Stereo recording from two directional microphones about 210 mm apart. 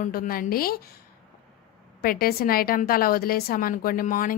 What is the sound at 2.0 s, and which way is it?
A woman's voice, 45° left (ahead or behind).